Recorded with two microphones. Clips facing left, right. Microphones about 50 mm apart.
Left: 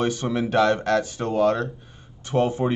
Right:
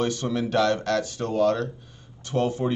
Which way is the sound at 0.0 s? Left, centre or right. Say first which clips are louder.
Left 2 dB; left.